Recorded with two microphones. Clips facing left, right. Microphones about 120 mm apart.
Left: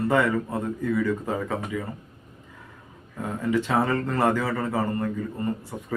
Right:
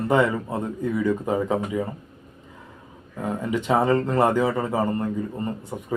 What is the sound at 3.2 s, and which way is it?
A man's voice, 20° right (ahead or behind).